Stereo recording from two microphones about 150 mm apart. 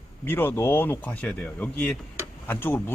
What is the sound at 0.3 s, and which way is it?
Speech, 15° left (ahead or behind).